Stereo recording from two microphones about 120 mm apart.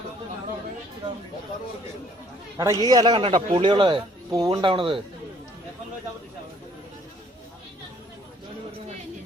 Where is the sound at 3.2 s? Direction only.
45° right (ahead or behind).